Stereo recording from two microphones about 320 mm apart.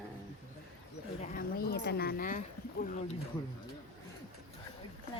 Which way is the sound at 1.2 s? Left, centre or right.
Left.